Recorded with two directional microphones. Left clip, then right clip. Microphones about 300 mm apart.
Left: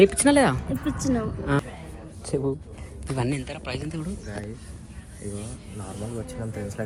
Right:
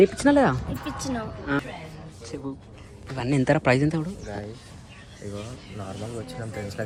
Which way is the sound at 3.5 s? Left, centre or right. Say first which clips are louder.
Right 12 dB; right.